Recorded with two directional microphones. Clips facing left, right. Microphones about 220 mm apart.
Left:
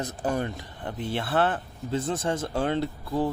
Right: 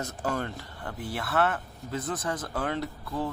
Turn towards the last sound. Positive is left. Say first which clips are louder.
# left 5 dB
turn(degrees=30)  # may be behind; listen again after turning